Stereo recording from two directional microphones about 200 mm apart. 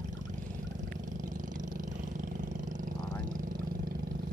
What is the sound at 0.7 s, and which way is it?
Vehicle, 40° right (ahead or behind).